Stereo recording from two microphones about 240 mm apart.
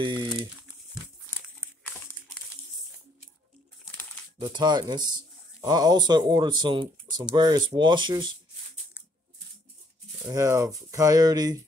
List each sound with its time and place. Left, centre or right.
0.0 s speech: centre
4.4 s speech: centre
10.2 s speech: centre